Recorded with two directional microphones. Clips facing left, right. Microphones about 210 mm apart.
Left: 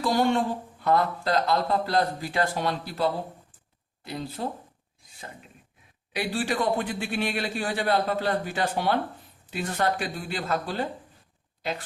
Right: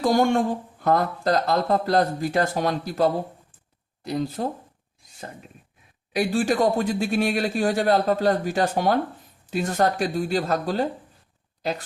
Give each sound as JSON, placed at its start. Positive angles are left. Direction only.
{"t": 0.0, "sound": "a man's voice", "side_deg": -45}
{"t": 6.1, "sound": "a man's voice", "side_deg": -45}